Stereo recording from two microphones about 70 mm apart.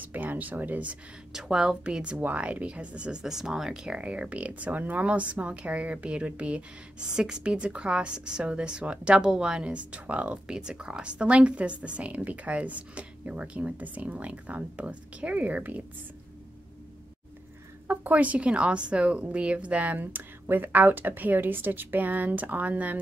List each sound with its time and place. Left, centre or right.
0.0 s speech: right
1.3 s a woman's voice: centre
2.1 s a woman's voice: right
17.8 s a woman's voice: right